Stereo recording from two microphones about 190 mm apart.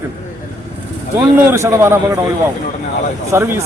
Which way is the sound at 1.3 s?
15° right (ahead or behind).